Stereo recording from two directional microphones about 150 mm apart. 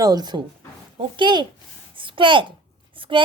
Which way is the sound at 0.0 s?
25° right (ahead or behind).